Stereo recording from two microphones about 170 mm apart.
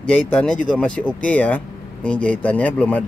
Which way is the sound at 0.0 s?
5° left (ahead or behind).